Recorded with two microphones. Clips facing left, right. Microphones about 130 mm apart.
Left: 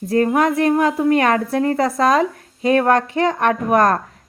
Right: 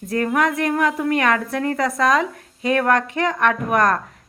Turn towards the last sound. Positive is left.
turn(degrees=35)  # may be behind; listen again after turning